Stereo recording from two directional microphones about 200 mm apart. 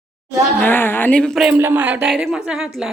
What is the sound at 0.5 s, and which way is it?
A woman's voice, 10° left (ahead or behind).